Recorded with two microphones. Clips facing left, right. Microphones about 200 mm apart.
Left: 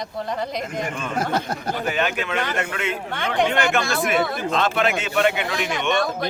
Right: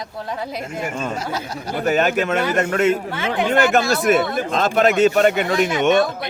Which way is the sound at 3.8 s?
40° right (ahead or behind).